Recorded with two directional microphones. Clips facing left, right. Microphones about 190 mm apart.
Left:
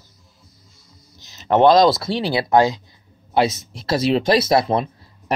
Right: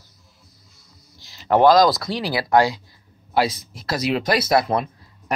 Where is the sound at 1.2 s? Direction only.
20° left (ahead or behind).